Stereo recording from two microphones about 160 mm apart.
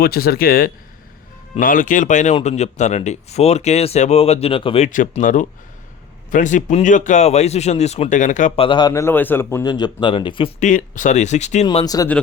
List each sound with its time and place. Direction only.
0.0 s speech: 75° left (ahead or behind); by 4.9 s 35° left (ahead or behind)
4.9 s speech: 55° left (ahead or behind)
8.5 s speech: 30° left (ahead or behind)
8.9 s speech: 15° left (ahead or behind); by 10.5 s 30° left (ahead or behind)
10.6 s speech: 50° left (ahead or behind)
11.6 s speech: 35° left (ahead or behind)